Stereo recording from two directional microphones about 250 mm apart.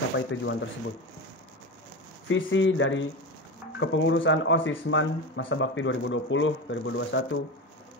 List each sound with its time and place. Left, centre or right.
0.3 s speech: left
2.2 s speech: left